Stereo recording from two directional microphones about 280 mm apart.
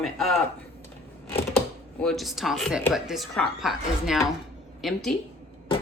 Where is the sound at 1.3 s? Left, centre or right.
Centre.